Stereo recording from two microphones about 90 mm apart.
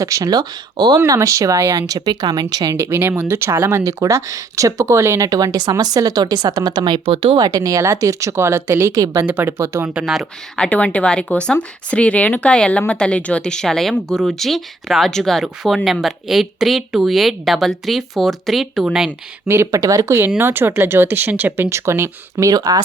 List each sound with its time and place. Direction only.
0.0 s speech: 40° right (ahead or behind)
1.9 s speech: 50° right (ahead or behind)
2.7 s speech: 30° right (ahead or behind); by 7.3 s 85° right
7.3 s speech: 45° right (ahead or behind)
9.9 s speech: 10° right (ahead or behind)
10.6 s speech: 15° left (ahead or behind); by 19.1 s 5° right (ahead or behind)
19.7 s speech: 40° right (ahead or behind)
20.4 s speech: 25° right (ahead or behind); by 22.8 s 45° right (ahead or behind)